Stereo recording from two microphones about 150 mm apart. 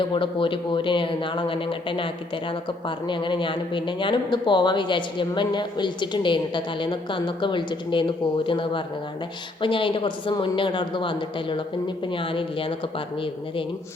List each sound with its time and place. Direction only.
0.0 s speech: 35° left (ahead or behind)
3.1 s speech: 30° left (ahead or behind)